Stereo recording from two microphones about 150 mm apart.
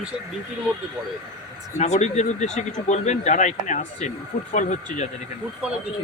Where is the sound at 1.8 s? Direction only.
50° left (ahead or behind).